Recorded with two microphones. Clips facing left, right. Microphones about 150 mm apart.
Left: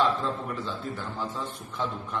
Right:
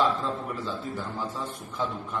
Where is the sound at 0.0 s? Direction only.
Centre (ahead or behind).